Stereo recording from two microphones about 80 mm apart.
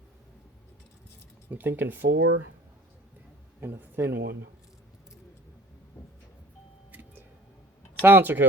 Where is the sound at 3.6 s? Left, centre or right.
Right.